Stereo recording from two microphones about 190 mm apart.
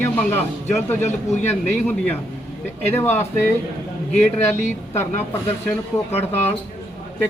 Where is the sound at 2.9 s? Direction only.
10° left (ahead or behind).